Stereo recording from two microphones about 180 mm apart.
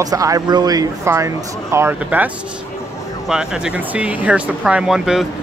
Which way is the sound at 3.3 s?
5° right (ahead or behind).